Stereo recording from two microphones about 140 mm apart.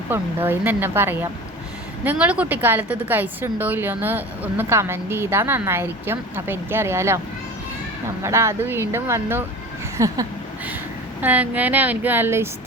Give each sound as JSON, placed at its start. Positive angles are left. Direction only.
{"t": 0.1, "sound": "a woman's voice", "side_deg": -15}
{"t": 8.2, "sound": "a woman's voice", "side_deg": -20}
{"t": 11.2, "sound": "a woman's voice", "side_deg": -10}